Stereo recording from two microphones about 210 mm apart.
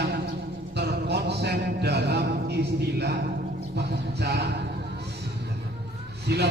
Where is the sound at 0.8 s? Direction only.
55° right (ahead or behind).